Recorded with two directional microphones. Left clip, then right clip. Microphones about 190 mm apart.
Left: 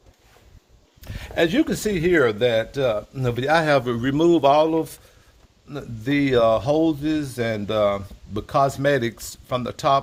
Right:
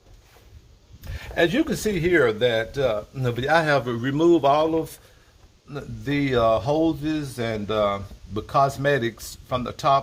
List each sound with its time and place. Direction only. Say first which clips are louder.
1.0 s speech: even; 50° left (ahead or behind)